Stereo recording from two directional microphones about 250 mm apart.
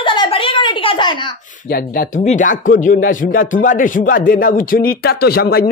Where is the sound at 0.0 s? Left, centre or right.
Centre.